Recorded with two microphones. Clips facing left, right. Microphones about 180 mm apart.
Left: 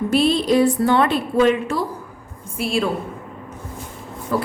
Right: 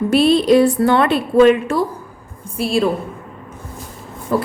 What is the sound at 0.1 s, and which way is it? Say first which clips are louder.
A woman's voice: right 5 dB; 65° right (ahead or behind).